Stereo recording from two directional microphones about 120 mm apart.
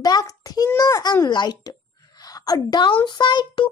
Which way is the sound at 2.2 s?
30° left (ahead or behind).